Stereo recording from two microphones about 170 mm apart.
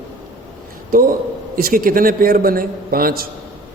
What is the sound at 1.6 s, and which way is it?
A man's voice, 60° right (ahead or behind).